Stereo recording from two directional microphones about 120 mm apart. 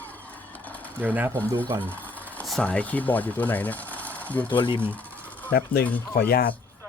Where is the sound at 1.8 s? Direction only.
15° left (ahead or behind).